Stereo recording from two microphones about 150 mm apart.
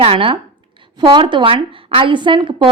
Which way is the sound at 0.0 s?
40° right (ahead or behind).